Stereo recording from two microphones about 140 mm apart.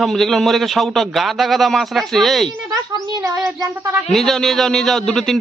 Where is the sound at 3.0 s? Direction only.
25° right (ahead or behind).